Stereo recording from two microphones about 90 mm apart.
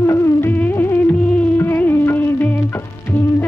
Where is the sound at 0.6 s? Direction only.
20° left (ahead or behind).